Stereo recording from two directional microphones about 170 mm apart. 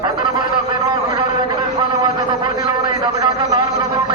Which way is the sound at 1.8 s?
25° right (ahead or behind).